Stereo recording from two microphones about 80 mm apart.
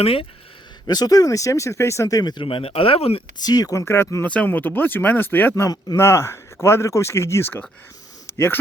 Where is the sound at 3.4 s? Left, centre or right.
Left.